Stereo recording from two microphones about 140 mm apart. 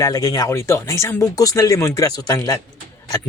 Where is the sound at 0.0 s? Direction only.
25° left (ahead or behind).